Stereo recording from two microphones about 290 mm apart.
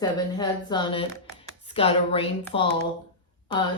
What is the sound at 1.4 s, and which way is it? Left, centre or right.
Chopping, centre.